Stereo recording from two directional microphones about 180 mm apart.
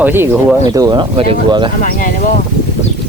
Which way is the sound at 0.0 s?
10° right (ahead or behind).